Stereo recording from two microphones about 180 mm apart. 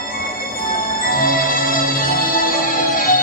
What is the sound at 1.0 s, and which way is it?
Music, 50° left (ahead or behind).